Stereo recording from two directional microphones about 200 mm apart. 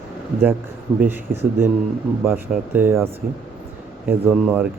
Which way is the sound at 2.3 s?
10° right (ahead or behind).